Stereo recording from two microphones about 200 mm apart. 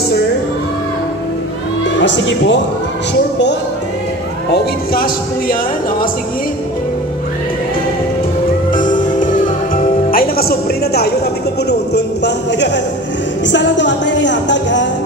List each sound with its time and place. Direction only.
2.0 s a woman's voice: 65° left (ahead or behind)
4.9 s speech: 45° left (ahead or behind)
8.7 s music: 40° left (ahead or behind)
10.1 s a man's voice: 50° left (ahead or behind); by 14.9 s 65° left (ahead or behind)